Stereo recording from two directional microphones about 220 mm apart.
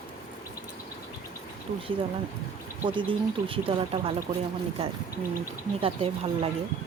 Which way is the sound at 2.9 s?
20° right (ahead or behind).